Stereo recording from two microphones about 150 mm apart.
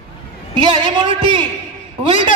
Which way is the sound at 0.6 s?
30° right (ahead or behind).